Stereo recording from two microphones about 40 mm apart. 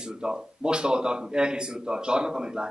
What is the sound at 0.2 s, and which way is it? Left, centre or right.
A man's voice, right.